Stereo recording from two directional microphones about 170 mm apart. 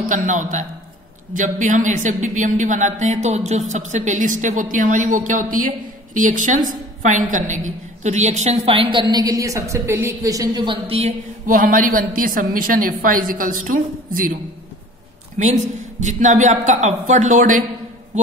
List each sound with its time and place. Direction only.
0.1 s a woman's voice: 50° right (ahead or behind)
11.4 s a woman's voice: 50° right (ahead or behind)
15.3 s speech: 45° right (ahead or behind)